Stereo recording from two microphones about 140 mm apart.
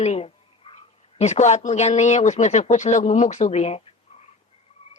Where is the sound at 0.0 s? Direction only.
50° left (ahead or behind).